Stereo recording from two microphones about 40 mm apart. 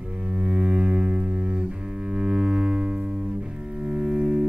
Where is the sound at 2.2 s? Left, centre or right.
Right.